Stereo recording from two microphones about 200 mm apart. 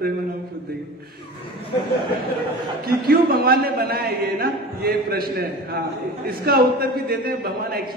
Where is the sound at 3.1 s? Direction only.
50° right (ahead or behind).